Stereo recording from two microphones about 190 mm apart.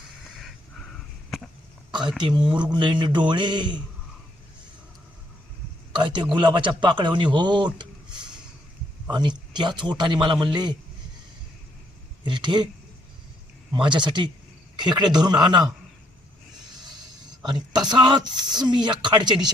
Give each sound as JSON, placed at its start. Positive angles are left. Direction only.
{"t": 0.3, "sound": "a sound", "side_deg": 0}
{"t": 2.2, "sound": "speech", "side_deg": -25}
{"t": 5.9, "sound": "a man's voice", "side_deg": -25}
{"t": 9.0, "sound": "speech", "side_deg": -25}
{"t": 12.2, "sound": "speech", "side_deg": -25}
{"t": 13.7, "sound": "speech", "side_deg": -25}
{"t": 17.8, "sound": "speech", "side_deg": -20}